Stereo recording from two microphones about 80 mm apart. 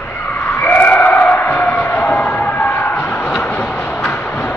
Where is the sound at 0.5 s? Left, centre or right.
Left.